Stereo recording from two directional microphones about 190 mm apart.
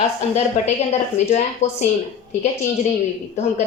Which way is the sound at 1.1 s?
35° left (ahead or behind).